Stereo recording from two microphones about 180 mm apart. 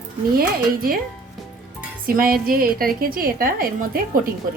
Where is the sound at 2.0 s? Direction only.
50° right (ahead or behind).